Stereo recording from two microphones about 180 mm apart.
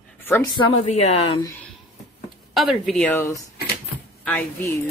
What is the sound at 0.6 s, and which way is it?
Speech, 35° left (ahead or behind).